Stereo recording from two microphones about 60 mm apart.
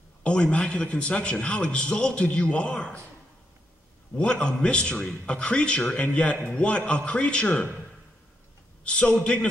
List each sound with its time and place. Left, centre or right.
0.2 s a man's voice: centre
4.2 s a man's voice: centre
8.8 s a man's voice: centre